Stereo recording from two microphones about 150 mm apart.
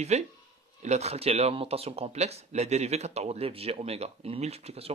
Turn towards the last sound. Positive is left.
turn(degrees=-45)  # may be behind; listen again after turning